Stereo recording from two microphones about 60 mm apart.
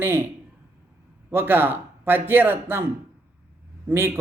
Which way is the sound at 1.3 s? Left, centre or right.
Right.